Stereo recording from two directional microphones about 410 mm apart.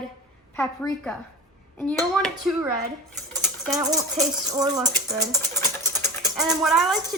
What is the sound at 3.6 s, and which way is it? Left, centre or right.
Speech, centre.